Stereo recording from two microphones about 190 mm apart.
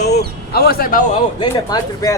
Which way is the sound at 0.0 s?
60° left (ahead or behind).